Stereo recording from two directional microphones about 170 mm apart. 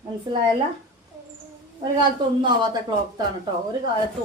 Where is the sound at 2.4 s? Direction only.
25° right (ahead or behind).